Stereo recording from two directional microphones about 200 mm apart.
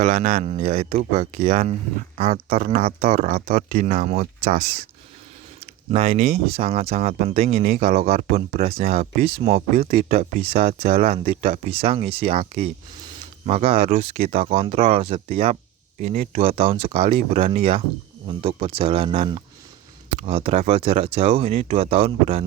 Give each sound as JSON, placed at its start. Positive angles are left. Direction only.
{"t": 0.0, "sound": "speech", "side_deg": -50}
{"t": 1.4, "sound": "speech", "side_deg": -45}
{"t": 3.4, "sound": "speech", "side_deg": -50}
{"t": 5.9, "sound": "speech", "side_deg": -40}
{"t": 6.5, "sound": "speech", "side_deg": -30}
{"t": 7.8, "sound": "speech", "side_deg": -50}
{"t": 9.2, "sound": "speech", "side_deg": -30}
{"t": 9.7, "sound": "speech", "side_deg": -45}
{"t": 10.4, "sound": "speech", "side_deg": -30}
{"t": 10.8, "sound": "speech", "side_deg": -50}
{"t": 11.1, "sound": "speech", "side_deg": -30}